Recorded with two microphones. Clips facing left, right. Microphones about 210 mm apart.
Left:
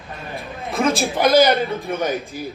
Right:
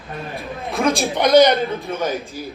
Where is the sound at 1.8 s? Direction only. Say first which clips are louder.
Left 2 dB; 15° left (ahead or behind).